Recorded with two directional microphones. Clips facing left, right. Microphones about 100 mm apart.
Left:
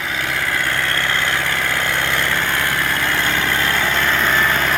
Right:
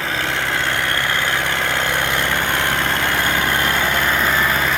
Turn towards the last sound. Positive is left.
turn(degrees=-5)  # may be behind; listen again after turning